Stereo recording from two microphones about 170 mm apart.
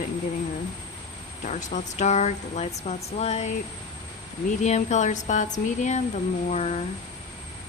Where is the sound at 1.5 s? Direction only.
45° left (ahead or behind).